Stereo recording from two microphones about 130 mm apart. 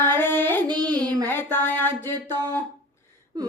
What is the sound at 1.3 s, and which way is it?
Speech, 15° left (ahead or behind).